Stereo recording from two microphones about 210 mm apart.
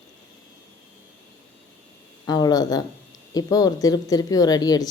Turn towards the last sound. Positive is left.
turn(degrees=20)  # may be behind; listen again after turning